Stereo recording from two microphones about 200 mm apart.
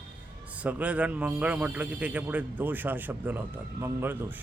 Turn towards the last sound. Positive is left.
turn(degrees=-10)  # may be behind; listen again after turning